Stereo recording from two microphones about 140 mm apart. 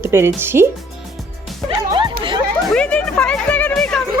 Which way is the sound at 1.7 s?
35° right (ahead or behind).